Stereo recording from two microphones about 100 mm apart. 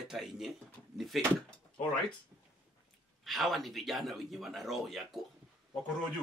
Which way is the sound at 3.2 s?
Centre (ahead or behind).